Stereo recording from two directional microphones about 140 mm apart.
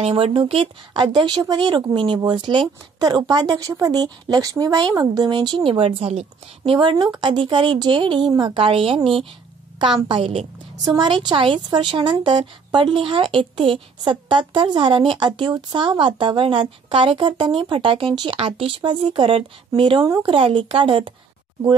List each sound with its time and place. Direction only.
0.0 s a woman's voice: 40° right (ahead or behind)